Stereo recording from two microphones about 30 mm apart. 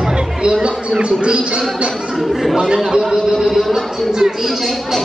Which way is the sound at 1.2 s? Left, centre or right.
Right.